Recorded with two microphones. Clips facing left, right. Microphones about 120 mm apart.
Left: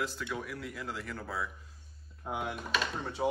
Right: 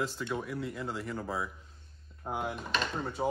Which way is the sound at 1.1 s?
20° right (ahead or behind).